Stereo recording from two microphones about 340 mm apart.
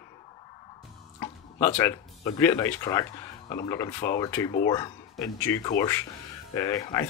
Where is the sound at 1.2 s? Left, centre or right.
Centre.